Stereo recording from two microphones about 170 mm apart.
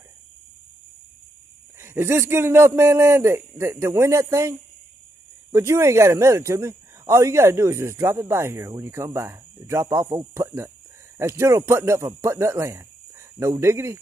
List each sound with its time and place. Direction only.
1.8 s speech: 15° right (ahead or behind)